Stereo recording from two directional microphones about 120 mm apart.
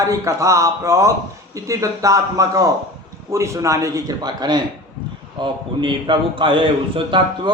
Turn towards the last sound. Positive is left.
turn(degrees=-40)  # may be behind; listen again after turning